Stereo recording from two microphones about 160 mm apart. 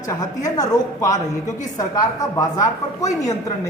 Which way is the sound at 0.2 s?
25° left (ahead or behind).